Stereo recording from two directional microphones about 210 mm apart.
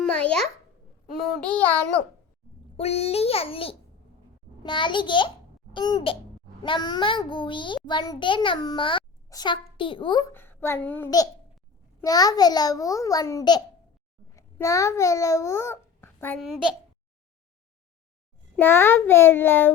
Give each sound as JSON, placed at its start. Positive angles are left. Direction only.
{"t": 0.0, "sound": "babbling", "side_deg": 5}
{"t": 1.2, "sound": "a child's voice", "side_deg": 5}
{"t": 2.7, "sound": "a child's voice", "side_deg": 30}
{"t": 18.5, "sound": "a child's voice", "side_deg": 10}